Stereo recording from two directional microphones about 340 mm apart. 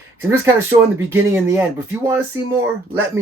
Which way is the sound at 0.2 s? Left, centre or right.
Centre.